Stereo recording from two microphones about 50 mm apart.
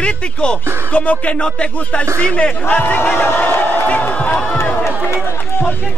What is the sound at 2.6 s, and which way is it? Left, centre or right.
Speech, left.